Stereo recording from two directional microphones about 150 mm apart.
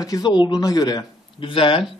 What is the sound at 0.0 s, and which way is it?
Speech, 25° left (ahead or behind).